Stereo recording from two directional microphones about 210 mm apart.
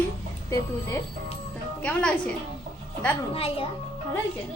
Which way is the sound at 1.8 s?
5° left (ahead or behind).